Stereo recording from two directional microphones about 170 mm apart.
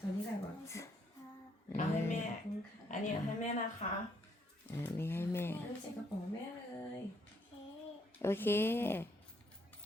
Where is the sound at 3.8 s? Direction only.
40° left (ahead or behind).